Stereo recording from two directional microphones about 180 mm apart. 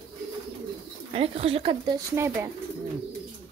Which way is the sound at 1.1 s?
30° right (ahead or behind).